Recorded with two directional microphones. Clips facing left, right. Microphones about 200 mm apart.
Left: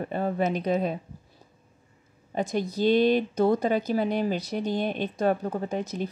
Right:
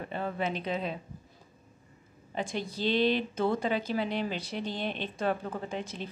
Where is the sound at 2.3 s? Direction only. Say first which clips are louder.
Left 7 dB; 40° left (ahead or behind).